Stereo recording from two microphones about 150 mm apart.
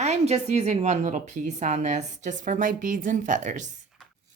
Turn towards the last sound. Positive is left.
turn(degrees=-55)  # may be behind; listen again after turning